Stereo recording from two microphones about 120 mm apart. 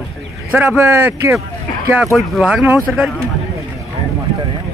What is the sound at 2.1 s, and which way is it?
Speech, centre (ahead or behind).